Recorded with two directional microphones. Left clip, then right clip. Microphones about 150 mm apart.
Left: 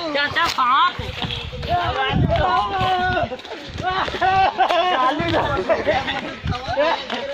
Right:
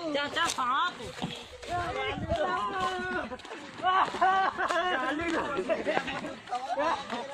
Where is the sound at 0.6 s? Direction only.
15° left (ahead or behind).